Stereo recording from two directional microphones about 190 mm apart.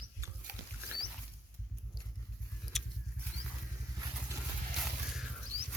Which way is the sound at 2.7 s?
Centre (ahead or behind).